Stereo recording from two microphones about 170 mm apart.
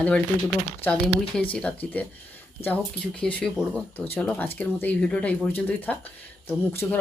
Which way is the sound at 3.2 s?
5° left (ahead or behind).